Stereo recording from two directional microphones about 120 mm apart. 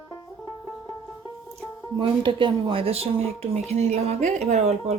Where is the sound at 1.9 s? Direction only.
45° right (ahead or behind).